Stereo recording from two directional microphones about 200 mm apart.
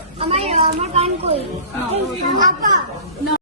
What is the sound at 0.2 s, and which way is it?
Music, 30° right (ahead or behind).